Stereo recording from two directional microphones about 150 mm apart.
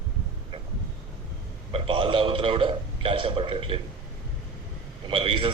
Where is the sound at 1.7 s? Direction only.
35° right (ahead or behind).